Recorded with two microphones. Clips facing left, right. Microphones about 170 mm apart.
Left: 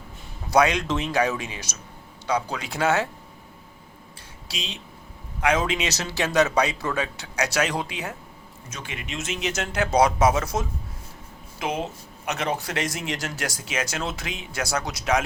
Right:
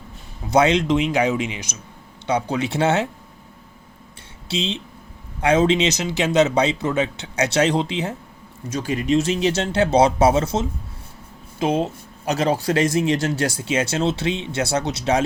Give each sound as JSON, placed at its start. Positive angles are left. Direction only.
{"t": 0.5, "sound": "speech", "side_deg": -25}
{"t": 4.4, "sound": "speech", "side_deg": -25}
{"t": 8.7, "sound": "speech", "side_deg": -35}